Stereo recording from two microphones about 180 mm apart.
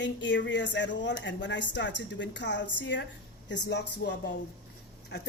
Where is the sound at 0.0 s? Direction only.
80° left.